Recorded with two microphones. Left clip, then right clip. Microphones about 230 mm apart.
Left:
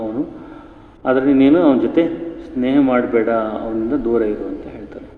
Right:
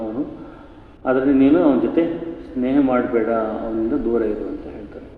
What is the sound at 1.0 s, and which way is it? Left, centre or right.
A man's voice, left.